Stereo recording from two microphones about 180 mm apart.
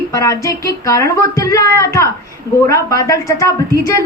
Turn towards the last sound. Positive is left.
turn(degrees=15)  # may be behind; listen again after turning